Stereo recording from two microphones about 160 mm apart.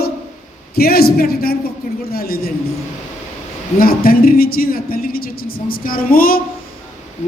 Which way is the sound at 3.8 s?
65° left (ahead or behind).